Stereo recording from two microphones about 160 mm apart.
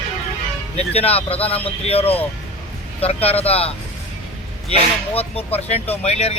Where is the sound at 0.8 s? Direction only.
40° left (ahead or behind).